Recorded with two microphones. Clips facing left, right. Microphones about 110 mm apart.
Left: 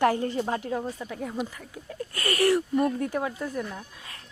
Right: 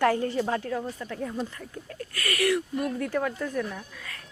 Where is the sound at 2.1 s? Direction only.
30° left (ahead or behind).